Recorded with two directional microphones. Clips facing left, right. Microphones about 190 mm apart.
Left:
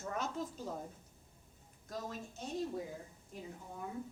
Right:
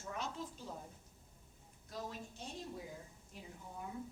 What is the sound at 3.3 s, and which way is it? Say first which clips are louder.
Speech: left 6 dB; 45° left (ahead or behind).